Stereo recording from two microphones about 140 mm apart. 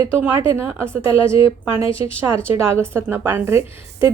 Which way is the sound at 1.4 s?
35° left (ahead or behind).